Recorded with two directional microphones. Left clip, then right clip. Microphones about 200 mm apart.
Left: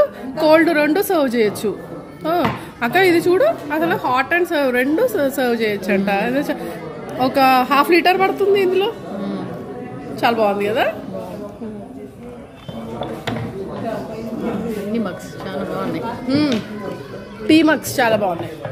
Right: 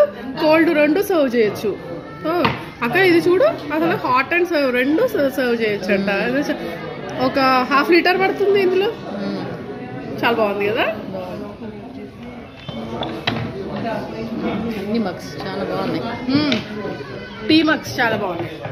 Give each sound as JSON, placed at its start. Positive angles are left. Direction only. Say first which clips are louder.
{"t": 0.4, "sound": "a woman's voice", "louder": "left 1 dB", "side_deg": 55}
{"t": 10.2, "sound": "a woman's voice", "louder": "left 1 dB", "side_deg": 60}
{"t": 14.9, "sound": "a woman's voice", "louder": "right 1 dB", "side_deg": -5}
{"t": 17.5, "sound": "a woman's voice", "louder": "left 2 dB", "side_deg": 55}